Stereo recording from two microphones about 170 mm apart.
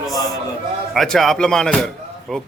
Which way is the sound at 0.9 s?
Centre (ahead or behind).